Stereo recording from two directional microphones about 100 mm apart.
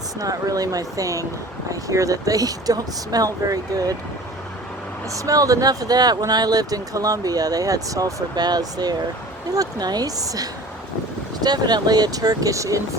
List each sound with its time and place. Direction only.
0.2 s speech: 35° right (ahead or behind)
5.1 s speech: 35° right (ahead or behind)